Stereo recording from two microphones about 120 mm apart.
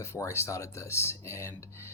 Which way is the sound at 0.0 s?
25° left (ahead or behind).